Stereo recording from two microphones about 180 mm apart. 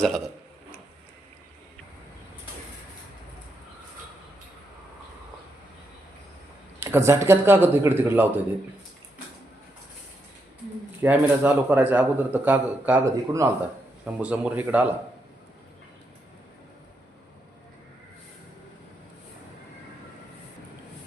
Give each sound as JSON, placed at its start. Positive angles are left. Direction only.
{"t": 0.0, "sound": "speech", "side_deg": 0}
{"t": 6.7, "sound": "a man's voice", "side_deg": -15}
{"t": 11.0, "sound": "a man's voice", "side_deg": -10}